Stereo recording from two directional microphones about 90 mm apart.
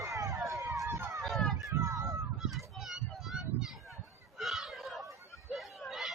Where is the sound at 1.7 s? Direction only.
30° right (ahead or behind).